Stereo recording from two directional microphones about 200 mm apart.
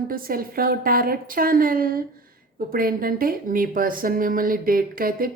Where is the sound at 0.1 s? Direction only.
45° right (ahead or behind).